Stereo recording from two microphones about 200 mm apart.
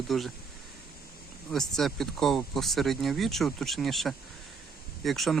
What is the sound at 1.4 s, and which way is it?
Speech, centre (ahead or behind).